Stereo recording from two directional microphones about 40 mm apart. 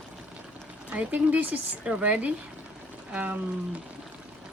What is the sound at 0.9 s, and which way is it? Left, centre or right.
Speech, right.